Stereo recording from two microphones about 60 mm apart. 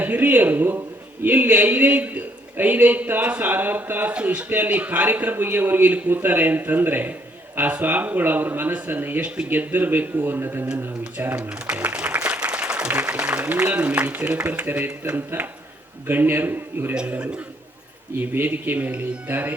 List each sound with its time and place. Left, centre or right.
0.0 s a man's voice: right
11.3 s speech: centre
11.8 s applause: right
13.0 s a man's voice: right
16.9 s speech: centre
18.2 s speech: right